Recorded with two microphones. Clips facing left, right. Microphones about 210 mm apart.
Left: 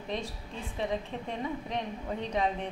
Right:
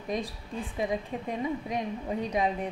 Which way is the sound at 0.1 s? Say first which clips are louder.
Right 4 dB; 10° right (ahead or behind).